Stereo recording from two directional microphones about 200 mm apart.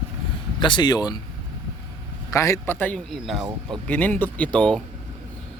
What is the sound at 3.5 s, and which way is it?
Speech, 20° right (ahead or behind).